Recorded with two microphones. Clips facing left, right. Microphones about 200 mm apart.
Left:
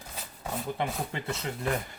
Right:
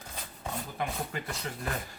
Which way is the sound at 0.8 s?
25° left (ahead or behind).